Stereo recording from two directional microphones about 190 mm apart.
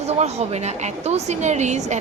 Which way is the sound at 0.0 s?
35° right (ahead or behind).